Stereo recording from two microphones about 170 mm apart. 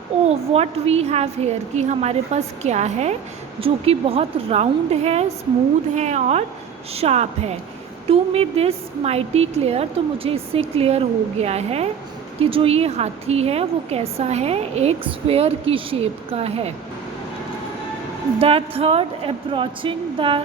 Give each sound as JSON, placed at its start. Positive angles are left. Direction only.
{"t": 0.3, "sound": "a woman's voice", "side_deg": -40}
{"t": 18.3, "sound": "a woman's voice", "side_deg": -35}